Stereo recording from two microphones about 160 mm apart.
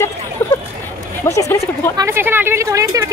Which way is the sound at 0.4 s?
10° left (ahead or behind).